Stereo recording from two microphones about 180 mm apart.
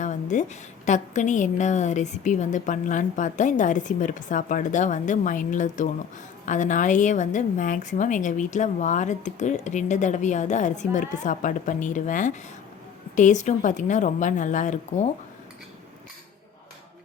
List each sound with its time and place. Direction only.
0.0 s a woman's voice: 40° left (ahead or behind)